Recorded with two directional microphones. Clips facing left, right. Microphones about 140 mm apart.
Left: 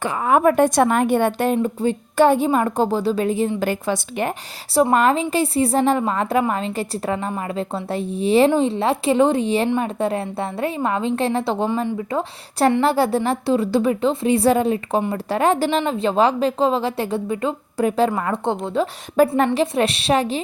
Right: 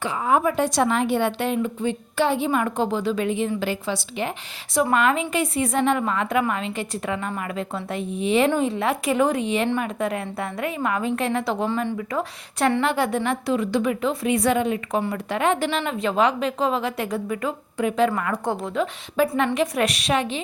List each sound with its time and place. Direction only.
0.0 s a woman's voice: 55° left (ahead or behind); by 3.5 s 35° left (ahead or behind)
3.6 s a woman's voice: 50° left (ahead or behind)
4.7 s a woman's voice: 35° left (ahead or behind)
19.2 s a woman's voice: 45° left (ahead or behind)
19.5 s a woman's voice: 30° left (ahead or behind)